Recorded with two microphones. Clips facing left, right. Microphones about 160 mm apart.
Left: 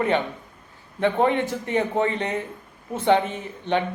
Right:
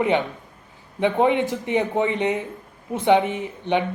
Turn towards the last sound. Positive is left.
turn(degrees=-15)  # may be behind; listen again after turning